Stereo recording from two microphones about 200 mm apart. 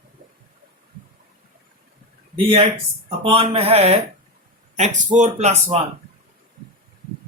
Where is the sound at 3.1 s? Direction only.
25° right (ahead or behind).